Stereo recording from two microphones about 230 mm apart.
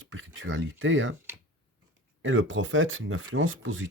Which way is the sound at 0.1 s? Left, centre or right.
Right.